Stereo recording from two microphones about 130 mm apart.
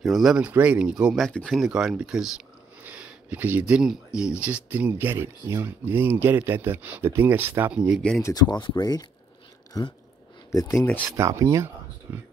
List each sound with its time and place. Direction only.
0.0 s speech: centre (ahead or behind)
8.2 s speech: 30° left (ahead or behind)
10.9 s speech: 10° left (ahead or behind)
11.1 s speech: 20° right (ahead or behind)